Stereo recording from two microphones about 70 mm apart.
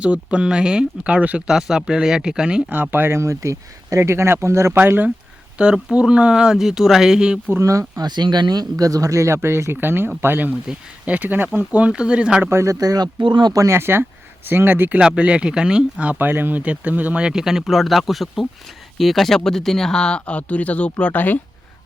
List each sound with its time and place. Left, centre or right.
0.0 s speech: centre
1.5 s speech: centre
2.6 s speech: right
3.2 s speech: right
4.8 s speech: right
5.5 s speech: centre
7.6 s speech: right
8.0 s speech: right; by 12.5 s centre
12.5 s speech: right
12.8 s speech: right
13.6 s speech: right
14.9 s speech: centre
16.1 s speech: right; by 21.3 s left